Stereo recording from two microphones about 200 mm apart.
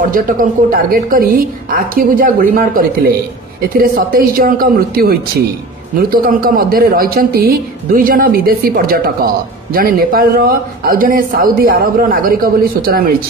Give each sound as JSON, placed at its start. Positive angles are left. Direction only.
{"t": 0.1, "sound": "speech", "side_deg": -45}